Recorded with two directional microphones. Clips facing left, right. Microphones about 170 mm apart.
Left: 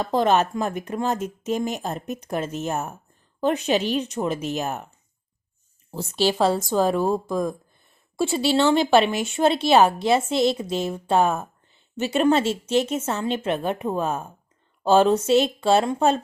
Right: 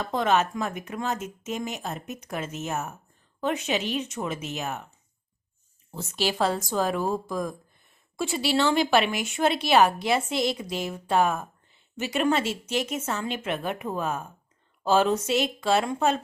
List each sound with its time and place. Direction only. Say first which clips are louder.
0.0 s speech: left 4 dB; 30° left (ahead or behind)
5.9 s speech: left 6 dB; 30° left (ahead or behind)